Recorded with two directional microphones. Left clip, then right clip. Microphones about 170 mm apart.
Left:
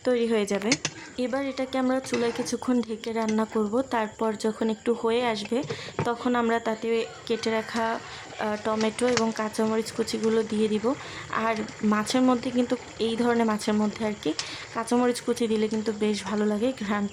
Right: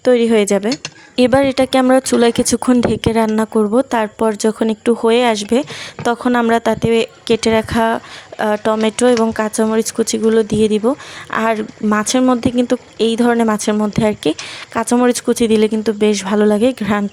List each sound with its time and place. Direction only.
0.0 s a woman's voice: 40° right (ahead or behind)
1.1 s a woman's voice: 55° right (ahead or behind)